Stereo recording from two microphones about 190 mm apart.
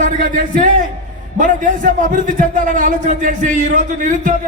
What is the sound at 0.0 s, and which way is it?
A man's voice, 45° right (ahead or behind).